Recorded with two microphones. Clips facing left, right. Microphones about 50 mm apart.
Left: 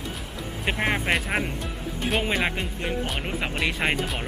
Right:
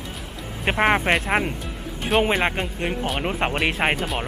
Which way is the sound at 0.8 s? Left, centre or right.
Right.